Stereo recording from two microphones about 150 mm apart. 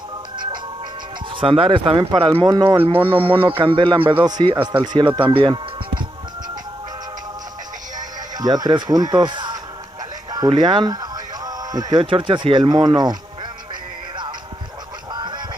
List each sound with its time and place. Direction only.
1.3 s speech: 35° right (ahead or behind)
8.4 s speech: 25° right (ahead or behind)
10.3 s music: 30° right (ahead or behind)
12.0 s speech: 35° right (ahead or behind)
15.1 s a sound: 30° right (ahead or behind)